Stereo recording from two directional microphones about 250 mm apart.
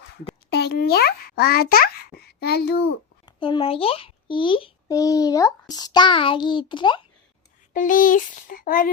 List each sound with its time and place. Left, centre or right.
0.5 s a child's voice: left
3.2 s a child's voice: centre
7.7 s speech: left